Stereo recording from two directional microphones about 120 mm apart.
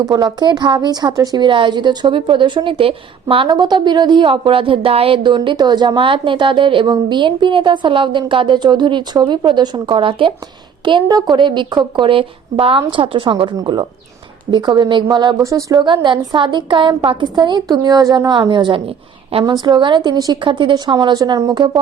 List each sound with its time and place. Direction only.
0.0 s a woman's voice: 35° right (ahead or behind)